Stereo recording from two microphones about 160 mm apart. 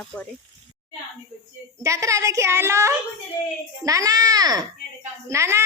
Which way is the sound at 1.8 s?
20° right (ahead or behind).